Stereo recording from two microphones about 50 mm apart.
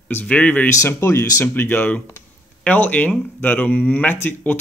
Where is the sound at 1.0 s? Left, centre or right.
Left.